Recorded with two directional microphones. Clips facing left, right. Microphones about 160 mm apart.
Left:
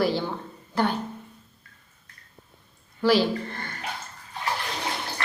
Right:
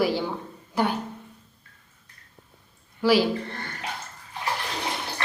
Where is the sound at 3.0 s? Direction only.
10° right (ahead or behind).